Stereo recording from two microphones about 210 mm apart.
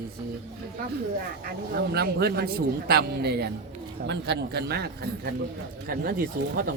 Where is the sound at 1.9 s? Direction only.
50° right (ahead or behind).